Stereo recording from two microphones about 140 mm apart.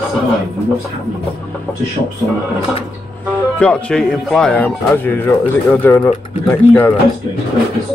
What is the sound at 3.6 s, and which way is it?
Speech, 5° left (ahead or behind).